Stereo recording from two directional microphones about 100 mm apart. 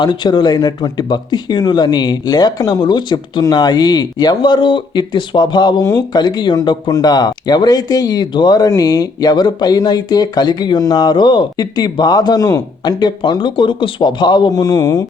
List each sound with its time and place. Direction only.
0.0 s speech: 45° left (ahead or behind)
12.8 s speech: 45° left (ahead or behind)
14.5 s speech: 35° left (ahead or behind)